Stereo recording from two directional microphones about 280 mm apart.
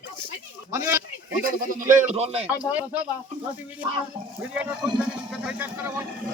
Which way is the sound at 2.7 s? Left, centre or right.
Centre.